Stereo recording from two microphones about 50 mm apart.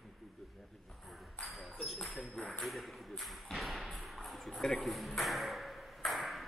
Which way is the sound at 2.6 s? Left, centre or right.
Centre.